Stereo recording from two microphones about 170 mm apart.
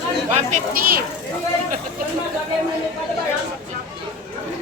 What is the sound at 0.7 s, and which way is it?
Speech, 60° right (ahead or behind).